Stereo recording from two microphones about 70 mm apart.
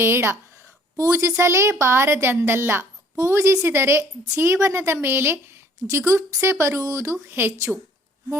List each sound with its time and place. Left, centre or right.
0.0 s a woman's voice: right
3.2 s a woman's voice: right